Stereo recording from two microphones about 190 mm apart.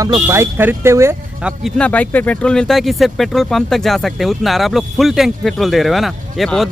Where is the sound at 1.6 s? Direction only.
5° left (ahead or behind).